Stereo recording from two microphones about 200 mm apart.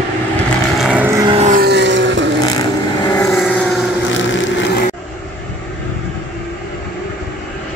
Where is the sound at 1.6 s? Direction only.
60° right (ahead or behind).